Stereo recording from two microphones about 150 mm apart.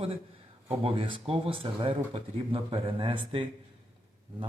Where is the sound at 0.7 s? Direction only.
35° right (ahead or behind).